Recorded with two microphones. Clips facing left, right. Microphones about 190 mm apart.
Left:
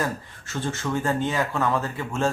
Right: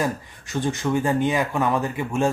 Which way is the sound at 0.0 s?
15° right (ahead or behind).